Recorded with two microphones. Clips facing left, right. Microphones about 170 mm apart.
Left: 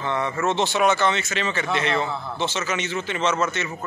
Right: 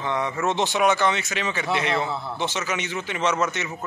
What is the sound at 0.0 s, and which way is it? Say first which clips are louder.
A man's voice: left 1 dB; 15° right (ahead or behind).